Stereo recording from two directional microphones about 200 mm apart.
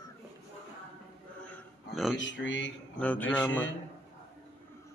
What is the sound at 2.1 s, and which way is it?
Speech, 65° left (ahead or behind).